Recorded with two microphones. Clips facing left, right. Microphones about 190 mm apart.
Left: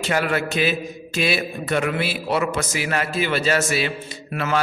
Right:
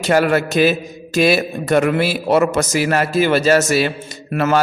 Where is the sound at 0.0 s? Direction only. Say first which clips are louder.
Right 7 dB; 40° right (ahead or behind).